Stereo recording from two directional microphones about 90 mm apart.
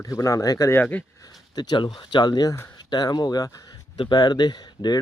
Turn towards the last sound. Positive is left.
turn(degrees=50)  # may be behind; listen again after turning